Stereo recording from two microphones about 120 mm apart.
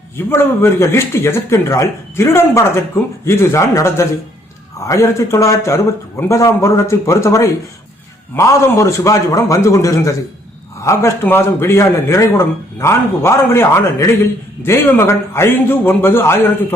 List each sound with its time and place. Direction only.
0.2 s speech: 20° left (ahead or behind)